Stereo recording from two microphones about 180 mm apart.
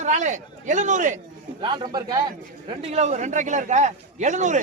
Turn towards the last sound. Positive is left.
turn(degrees=-40)  # may be behind; listen again after turning